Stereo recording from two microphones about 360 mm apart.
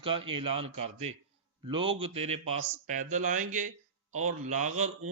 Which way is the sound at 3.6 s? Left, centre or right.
Right.